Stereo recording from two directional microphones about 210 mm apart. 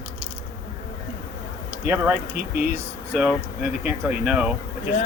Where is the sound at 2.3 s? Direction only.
50° right (ahead or behind).